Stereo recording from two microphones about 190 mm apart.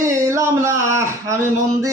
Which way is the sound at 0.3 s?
15° right (ahead or behind).